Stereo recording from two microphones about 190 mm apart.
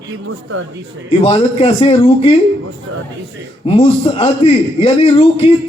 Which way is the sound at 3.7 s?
30° left (ahead or behind).